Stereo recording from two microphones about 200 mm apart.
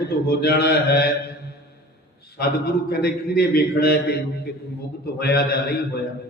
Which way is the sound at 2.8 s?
55° left (ahead or behind).